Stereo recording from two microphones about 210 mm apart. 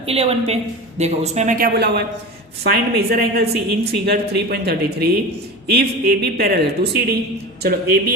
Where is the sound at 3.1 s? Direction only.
50° right (ahead or behind).